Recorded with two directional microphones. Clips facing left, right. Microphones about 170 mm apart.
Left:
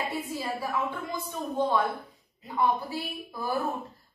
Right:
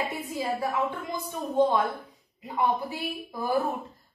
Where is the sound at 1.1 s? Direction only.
15° right (ahead or behind).